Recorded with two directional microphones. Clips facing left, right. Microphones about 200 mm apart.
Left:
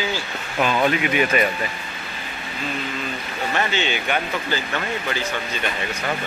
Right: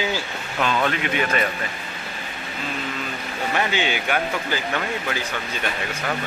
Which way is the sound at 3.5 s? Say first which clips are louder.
Even; 10° right (ahead or behind).